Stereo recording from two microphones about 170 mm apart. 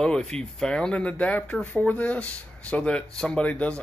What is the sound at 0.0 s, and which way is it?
Speech, 5° left (ahead or behind).